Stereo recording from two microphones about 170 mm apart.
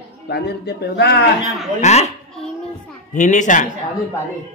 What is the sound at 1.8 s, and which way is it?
Speech, 40° left (ahead or behind).